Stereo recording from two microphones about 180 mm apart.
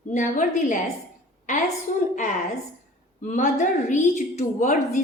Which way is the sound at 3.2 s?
45° left (ahead or behind).